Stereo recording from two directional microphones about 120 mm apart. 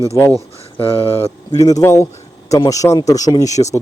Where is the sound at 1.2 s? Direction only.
30° left (ahead or behind).